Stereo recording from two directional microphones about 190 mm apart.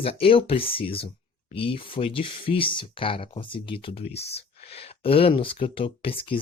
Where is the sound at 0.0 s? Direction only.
30° left (ahead or behind).